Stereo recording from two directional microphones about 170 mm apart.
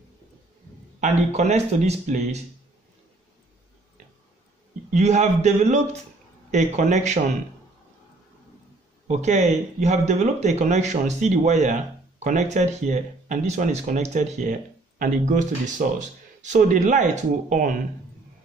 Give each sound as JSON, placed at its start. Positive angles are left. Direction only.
{"t": 1.0, "sound": "speech", "side_deg": -40}
{"t": 4.9, "sound": "speech", "side_deg": -45}
{"t": 9.0, "sound": "speech", "side_deg": -40}